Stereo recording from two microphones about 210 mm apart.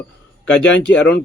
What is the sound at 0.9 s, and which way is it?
Speech, 55° left (ahead or behind).